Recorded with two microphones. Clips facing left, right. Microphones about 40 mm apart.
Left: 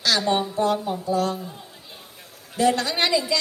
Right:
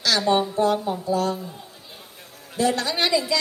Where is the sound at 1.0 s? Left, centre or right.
Left.